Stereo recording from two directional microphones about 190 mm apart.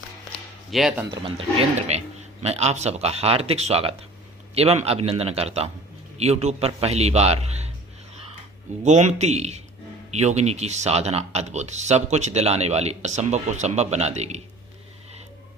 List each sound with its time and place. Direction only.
0.7 s speech: centre (ahead or behind)
1.2 s speech: 30° right (ahead or behind)
8.8 s speech: 40° right (ahead or behind)